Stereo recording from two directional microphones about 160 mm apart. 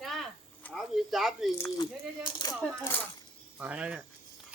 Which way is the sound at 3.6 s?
5° right (ahead or behind).